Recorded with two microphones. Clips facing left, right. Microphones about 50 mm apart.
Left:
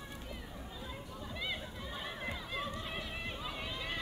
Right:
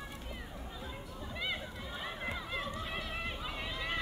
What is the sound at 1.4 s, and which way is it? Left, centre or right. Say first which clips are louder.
Run: right 3 dB; centre.